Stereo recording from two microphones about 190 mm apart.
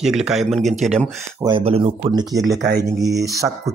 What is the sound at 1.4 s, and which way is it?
Speech, 30° right (ahead or behind).